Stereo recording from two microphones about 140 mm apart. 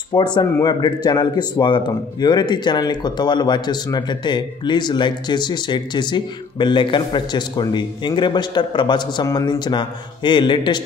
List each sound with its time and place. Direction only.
0.1 s speech: 30° left (ahead or behind)